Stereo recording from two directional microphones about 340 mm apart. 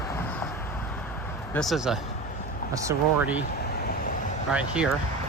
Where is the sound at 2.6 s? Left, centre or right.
Left.